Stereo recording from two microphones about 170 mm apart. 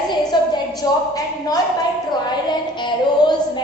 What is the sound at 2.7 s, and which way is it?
Speech, 25° left (ahead or behind).